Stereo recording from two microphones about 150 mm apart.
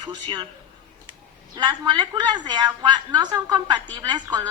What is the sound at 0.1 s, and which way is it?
Speech, 30° right (ahead or behind).